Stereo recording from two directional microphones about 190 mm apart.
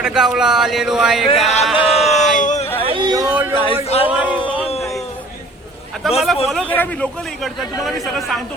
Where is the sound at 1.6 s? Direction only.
5° right (ahead or behind).